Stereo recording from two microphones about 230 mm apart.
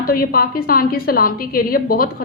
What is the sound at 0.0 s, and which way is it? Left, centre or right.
A woman's voice, left.